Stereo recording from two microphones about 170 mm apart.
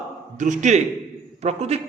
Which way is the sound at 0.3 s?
45° right (ahead or behind).